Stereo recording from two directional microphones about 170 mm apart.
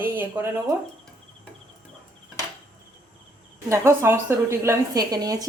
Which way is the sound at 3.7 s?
15° right (ahead or behind).